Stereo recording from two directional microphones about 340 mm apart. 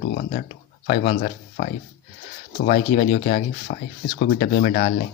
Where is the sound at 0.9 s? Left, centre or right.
Left.